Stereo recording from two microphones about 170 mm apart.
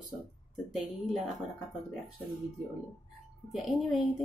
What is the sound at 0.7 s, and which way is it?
Speech, centre (ahead or behind).